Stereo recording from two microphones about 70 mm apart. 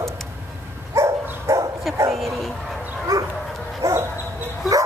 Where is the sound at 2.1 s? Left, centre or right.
Centre.